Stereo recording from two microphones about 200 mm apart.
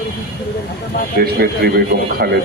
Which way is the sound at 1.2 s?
50° right (ahead or behind).